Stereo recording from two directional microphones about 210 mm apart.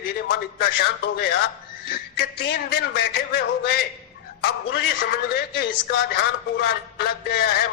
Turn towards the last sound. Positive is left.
turn(degrees=50)  # may be behind; listen again after turning